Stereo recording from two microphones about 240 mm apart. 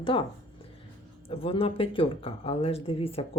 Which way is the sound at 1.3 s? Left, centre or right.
Left.